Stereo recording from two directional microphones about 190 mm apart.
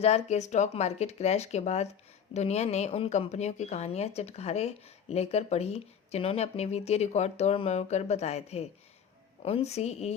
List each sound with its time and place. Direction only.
0.0 s a woman's voice: 35° left (ahead or behind)